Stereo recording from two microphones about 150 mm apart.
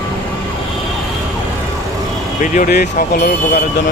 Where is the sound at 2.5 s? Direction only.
75° left (ahead or behind).